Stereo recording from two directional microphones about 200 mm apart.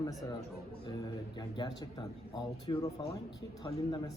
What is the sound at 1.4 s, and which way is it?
A man's voice, 20° left (ahead or behind).